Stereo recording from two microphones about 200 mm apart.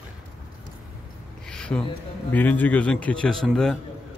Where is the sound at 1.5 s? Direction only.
5° left (ahead or behind).